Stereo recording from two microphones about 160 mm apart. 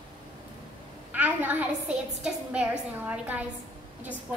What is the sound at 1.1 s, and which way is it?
A woman's voice, 10° right (ahead or behind).